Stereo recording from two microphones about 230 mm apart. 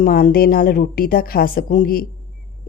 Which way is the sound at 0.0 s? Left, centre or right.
Left.